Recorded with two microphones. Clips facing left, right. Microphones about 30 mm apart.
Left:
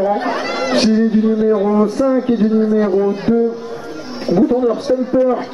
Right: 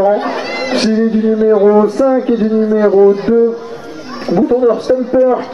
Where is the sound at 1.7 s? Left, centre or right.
Right.